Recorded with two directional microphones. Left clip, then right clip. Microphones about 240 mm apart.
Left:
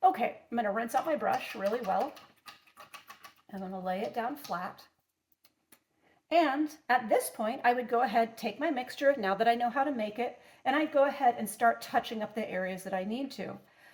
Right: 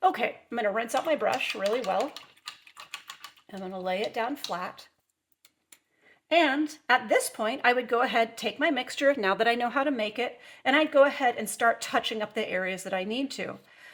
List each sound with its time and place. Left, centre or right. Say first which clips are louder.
0.0 s a woman's voice: right 1 dB; right
3.6 s a woman's voice: right 4 dB; right
6.2 s a woman's voice: right 3 dB; right